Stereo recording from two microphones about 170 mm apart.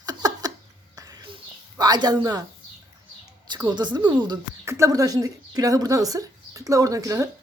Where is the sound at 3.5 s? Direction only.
25° right (ahead or behind).